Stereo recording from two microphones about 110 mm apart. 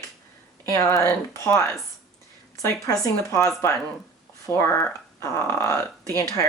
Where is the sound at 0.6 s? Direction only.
25° left (ahead or behind).